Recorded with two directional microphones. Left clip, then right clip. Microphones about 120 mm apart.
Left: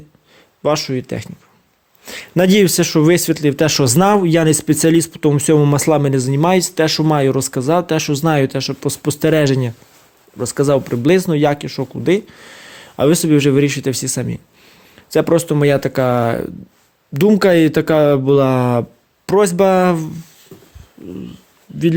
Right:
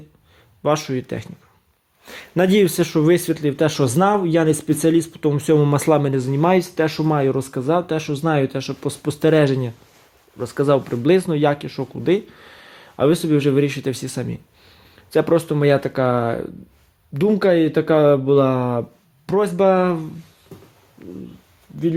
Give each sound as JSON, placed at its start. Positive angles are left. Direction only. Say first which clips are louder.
{"t": 0.6, "sound": "speech", "louder": "left 3 dB", "side_deg": 25}
{"t": 2.0, "sound": "a sound", "louder": "left 4 dB", "side_deg": 30}
{"t": 2.7, "sound": "speech", "louder": "left 4 dB", "side_deg": 55}
{"t": 5.5, "sound": "speech", "louder": "left 3 dB", "side_deg": 30}
{"t": 7.5, "sound": "speech", "louder": "left 4 dB", "side_deg": 55}
{"t": 9.4, "sound": "speech", "louder": "left 2 dB", "side_deg": 55}
{"t": 10.3, "sound": "speech", "louder": "left 4 dB", "side_deg": 45}
{"t": 10.7, "sound": "speech", "louder": "left 2 dB", "side_deg": 30}
{"t": 13.1, "sound": "speech", "louder": "left 4 dB", "side_deg": 55}
{"t": 13.6, "sound": "speech", "louder": "left 4 dB", "side_deg": 35}
{"t": 14.9, "sound": "speech", "louder": "left 3 dB", "side_deg": 40}
{"t": 20.5, "sound": "a sound", "louder": "left 1 dB", "side_deg": 15}